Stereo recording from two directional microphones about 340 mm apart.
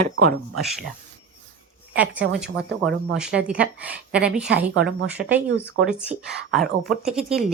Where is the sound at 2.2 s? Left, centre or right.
Right.